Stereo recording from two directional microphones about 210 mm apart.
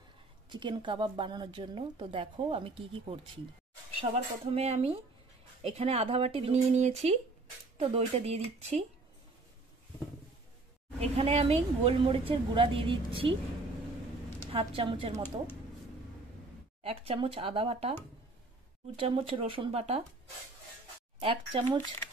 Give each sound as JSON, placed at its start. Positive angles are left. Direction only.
{"t": 0.5, "sound": "a woman's voice", "side_deg": -20}
{"t": 11.0, "sound": "a woman's voice", "side_deg": -30}
{"t": 14.5, "sound": "a woman's voice", "side_deg": -25}
{"t": 16.8, "sound": "a woman's voice", "side_deg": -25}
{"t": 18.9, "sound": "a woman's voice", "side_deg": -25}
{"t": 21.2, "sound": "a woman's voice", "side_deg": -25}